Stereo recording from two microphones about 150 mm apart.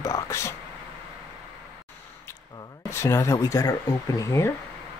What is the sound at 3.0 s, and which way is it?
Speech, 20° left (ahead or behind).